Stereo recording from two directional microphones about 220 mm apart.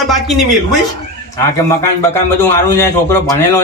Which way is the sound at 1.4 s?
10° left (ahead or behind).